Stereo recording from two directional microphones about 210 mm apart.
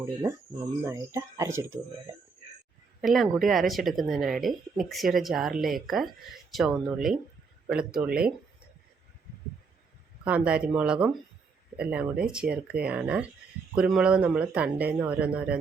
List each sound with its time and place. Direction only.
0.0 s speech: 15° right (ahead or behind)
3.0 s speech: centre (ahead or behind)
10.2 s speech: 5° right (ahead or behind)